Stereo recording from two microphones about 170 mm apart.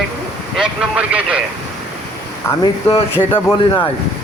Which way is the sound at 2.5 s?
15° left (ahead or behind).